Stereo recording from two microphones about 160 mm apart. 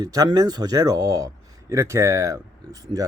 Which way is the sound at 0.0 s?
20° right (ahead or behind).